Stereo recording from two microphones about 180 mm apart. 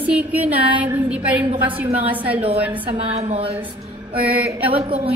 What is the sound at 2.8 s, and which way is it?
Speech, 35° right (ahead or behind).